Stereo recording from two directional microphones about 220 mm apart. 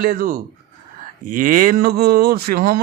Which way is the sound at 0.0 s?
40° right (ahead or behind).